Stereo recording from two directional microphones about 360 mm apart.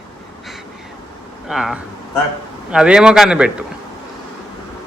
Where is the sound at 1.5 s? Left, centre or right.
Centre.